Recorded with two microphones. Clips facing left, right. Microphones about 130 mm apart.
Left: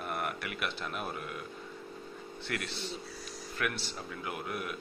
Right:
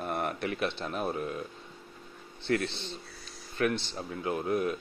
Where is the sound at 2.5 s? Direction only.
30° right (ahead or behind).